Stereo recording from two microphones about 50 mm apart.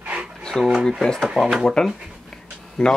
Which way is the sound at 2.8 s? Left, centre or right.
Centre.